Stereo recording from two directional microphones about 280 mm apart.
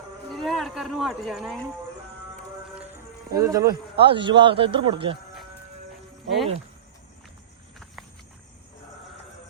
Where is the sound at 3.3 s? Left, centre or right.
Centre.